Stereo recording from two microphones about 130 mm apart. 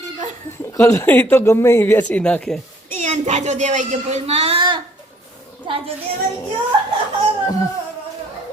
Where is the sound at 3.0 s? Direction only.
65° right (ahead or behind); by 5.8 s 40° right (ahead or behind).